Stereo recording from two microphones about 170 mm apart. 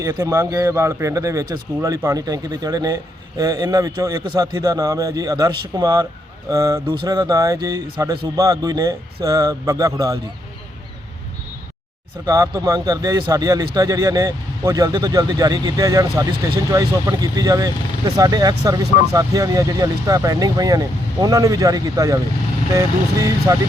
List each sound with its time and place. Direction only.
0.0 s speech: 20° right (ahead or behind)
12.2 s speech: 20° right (ahead or behind)
23.5 s speech: 20° right (ahead or behind)